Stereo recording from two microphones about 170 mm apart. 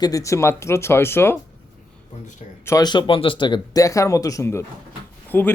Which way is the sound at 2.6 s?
20° left (ahead or behind).